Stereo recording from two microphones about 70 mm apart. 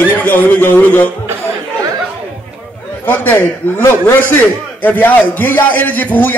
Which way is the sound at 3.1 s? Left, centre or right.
Left.